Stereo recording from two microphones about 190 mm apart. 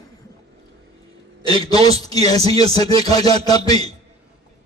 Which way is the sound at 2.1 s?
20° left (ahead or behind).